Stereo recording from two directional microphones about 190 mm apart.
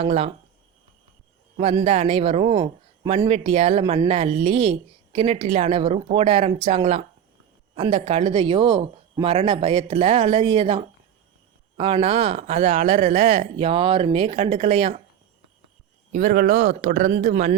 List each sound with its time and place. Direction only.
0.0 s speech: 35° right (ahead or behind)
1.8 s speech: 35° right (ahead or behind)
16.1 s speech: 45° right (ahead or behind)